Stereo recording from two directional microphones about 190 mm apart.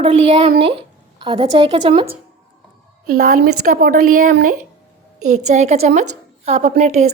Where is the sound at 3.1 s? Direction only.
50° right (ahead or behind).